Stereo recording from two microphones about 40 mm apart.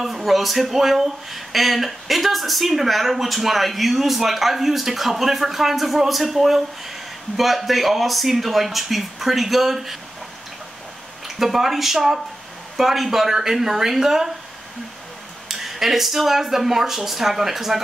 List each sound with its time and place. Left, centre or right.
0.0 s speech: centre
11.2 s speech: centre
15.4 s speech: centre